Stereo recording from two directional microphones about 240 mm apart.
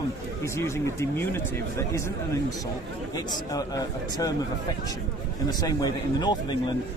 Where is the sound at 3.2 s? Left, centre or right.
Centre.